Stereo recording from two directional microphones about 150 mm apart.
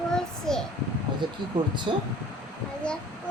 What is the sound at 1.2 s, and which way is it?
Speech, 30° right (ahead or behind).